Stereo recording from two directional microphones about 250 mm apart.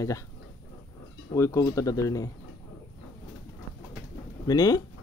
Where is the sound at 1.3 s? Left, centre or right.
Centre.